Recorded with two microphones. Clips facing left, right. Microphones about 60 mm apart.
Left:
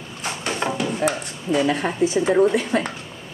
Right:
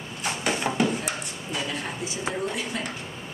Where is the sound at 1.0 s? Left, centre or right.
Left.